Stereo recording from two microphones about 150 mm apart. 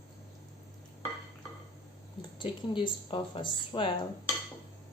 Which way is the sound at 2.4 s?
35° left (ahead or behind).